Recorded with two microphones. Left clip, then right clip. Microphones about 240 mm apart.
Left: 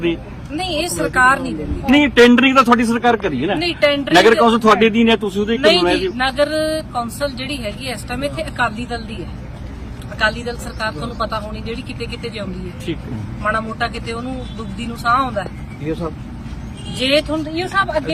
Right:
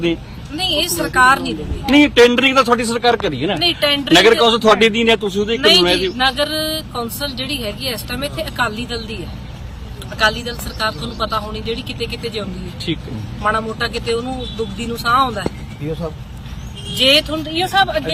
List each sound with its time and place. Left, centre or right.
0.5 s speech: centre
1.9 s speech: right
3.6 s speech: centre
4.1 s speech: right
6.1 s speech: centre
10.2 s speech: centre
12.9 s speech: right
13.4 s speech: centre
17.0 s speech: centre